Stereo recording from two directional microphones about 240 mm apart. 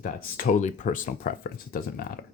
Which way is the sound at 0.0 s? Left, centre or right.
Left.